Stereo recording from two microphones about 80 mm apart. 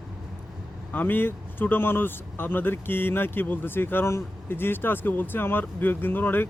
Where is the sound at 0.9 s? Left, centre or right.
Left.